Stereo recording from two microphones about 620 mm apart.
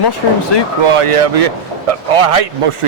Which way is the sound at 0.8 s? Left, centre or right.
Right.